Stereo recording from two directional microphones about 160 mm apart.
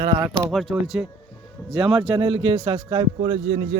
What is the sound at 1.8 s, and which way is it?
A man's voice, 35° right (ahead or behind).